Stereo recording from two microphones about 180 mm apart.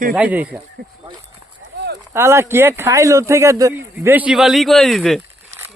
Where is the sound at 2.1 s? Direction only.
15° right (ahead or behind); by 5.2 s centre (ahead or behind).